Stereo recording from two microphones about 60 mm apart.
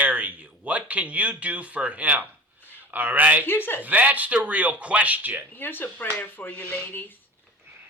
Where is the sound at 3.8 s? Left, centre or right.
Right.